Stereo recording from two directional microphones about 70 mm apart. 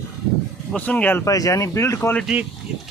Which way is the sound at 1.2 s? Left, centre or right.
Left.